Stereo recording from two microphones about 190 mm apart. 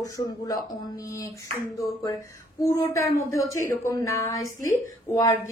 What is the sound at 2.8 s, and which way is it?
A woman's voice, 15° left (ahead or behind).